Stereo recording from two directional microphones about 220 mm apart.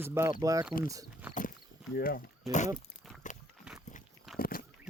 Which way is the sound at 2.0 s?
40° left (ahead or behind).